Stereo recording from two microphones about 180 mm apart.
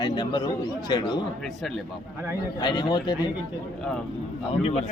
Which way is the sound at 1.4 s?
Centre (ahead or behind).